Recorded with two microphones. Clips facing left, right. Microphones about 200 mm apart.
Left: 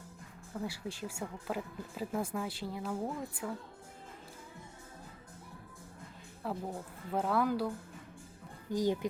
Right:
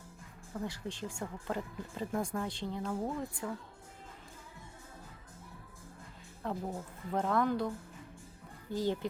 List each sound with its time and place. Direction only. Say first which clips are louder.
0.5 s speech: even; 10° left (ahead or behind)
6.4 s speech: right 1 dB; 5° left (ahead or behind)
8.7 s speech: left 2 dB; 15° left (ahead or behind)